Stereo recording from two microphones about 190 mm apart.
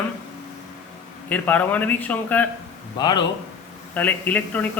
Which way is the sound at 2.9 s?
20° left (ahead or behind).